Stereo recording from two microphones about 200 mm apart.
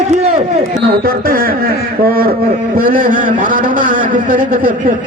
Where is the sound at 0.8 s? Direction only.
50° right (ahead or behind).